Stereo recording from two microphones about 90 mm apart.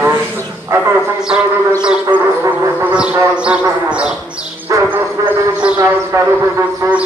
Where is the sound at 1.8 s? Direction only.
10° right (ahead or behind).